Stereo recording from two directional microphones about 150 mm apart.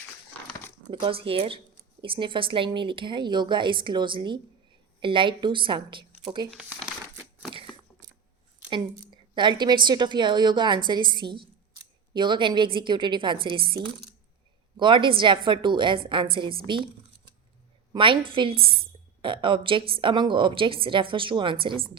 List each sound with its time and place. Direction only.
0.9 s speech: 30° right (ahead or behind)
6.5 s crumpling: 5° right (ahead or behind)
8.7 s speech: 30° right (ahead or behind)
14.8 s speech: 35° right (ahead or behind)
17.9 s a woman's voice: 35° right (ahead or behind)